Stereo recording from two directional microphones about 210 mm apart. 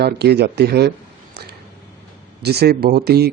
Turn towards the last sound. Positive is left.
turn(degrees=-50)  # may be behind; listen again after turning